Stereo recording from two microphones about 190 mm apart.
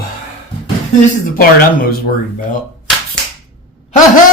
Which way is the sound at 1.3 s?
50° left (ahead or behind).